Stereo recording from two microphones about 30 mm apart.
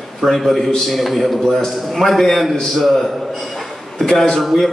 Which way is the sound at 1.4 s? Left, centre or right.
Centre.